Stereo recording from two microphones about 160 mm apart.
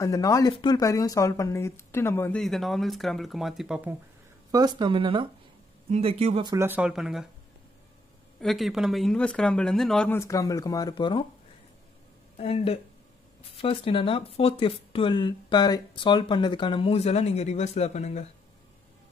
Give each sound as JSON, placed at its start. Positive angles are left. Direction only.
{"t": 0.0, "sound": "speech", "side_deg": 20}
{"t": 2.4, "sound": "speech", "side_deg": 0}
{"t": 4.5, "sound": "speech", "side_deg": -25}
{"t": 6.4, "sound": "speech", "side_deg": -20}
{"t": 8.4, "sound": "speech", "side_deg": 0}
{"t": 10.1, "sound": "speech", "side_deg": 20}
{"t": 12.4, "sound": "speech", "side_deg": 40}